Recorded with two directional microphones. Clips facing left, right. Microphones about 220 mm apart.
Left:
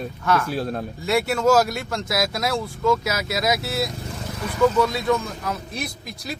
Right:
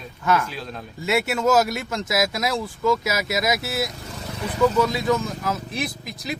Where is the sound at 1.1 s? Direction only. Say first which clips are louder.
Left 1 dB; 5° right (ahead or behind).